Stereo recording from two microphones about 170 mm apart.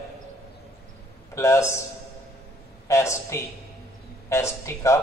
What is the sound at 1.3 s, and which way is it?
Speech, 15° left (ahead or behind).